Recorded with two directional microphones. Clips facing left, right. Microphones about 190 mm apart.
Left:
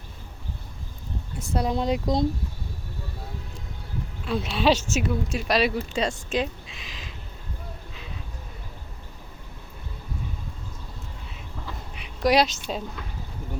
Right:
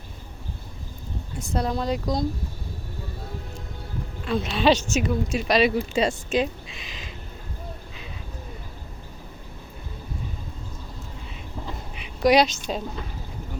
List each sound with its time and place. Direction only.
1.4 s speech: 10° left (ahead or behind)
1.7 s speech: 20° left (ahead or behind)
4.3 s speech: 5° left (ahead or behind)
11.9 s speech: centre (ahead or behind)